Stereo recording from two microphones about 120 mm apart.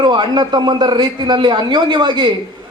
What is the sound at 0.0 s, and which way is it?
Speech, 40° right (ahead or behind).